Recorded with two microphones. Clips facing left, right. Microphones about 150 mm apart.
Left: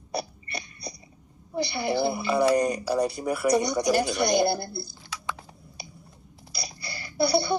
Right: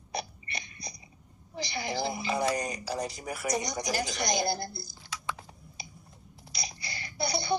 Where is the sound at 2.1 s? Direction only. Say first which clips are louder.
Left 8 dB; 60° left (ahead or behind).